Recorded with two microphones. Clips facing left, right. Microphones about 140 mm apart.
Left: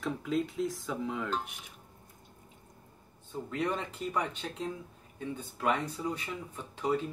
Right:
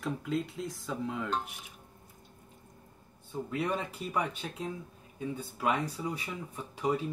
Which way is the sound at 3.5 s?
10° right (ahead or behind).